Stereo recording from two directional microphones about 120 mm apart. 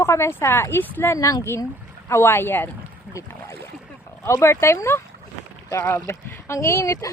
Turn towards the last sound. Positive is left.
turn(degrees=25)  # may be behind; listen again after turning